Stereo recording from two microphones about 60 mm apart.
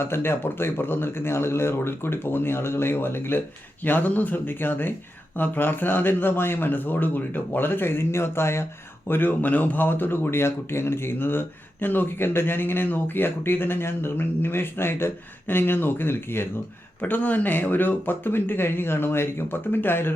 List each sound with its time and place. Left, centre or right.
0.0 s speech: left
9.0 s speech: left
17.0 s speech: left